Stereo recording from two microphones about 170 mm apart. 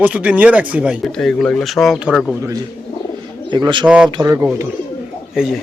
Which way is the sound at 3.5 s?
25° right (ahead or behind).